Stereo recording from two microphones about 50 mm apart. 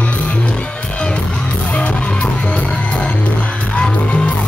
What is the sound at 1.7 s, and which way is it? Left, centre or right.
Music, left.